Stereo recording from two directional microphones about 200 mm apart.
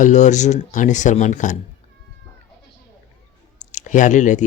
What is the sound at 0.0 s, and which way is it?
Speech, 35° left (ahead or behind).